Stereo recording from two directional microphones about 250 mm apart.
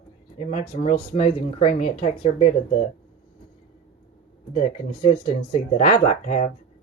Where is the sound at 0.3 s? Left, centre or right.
Left.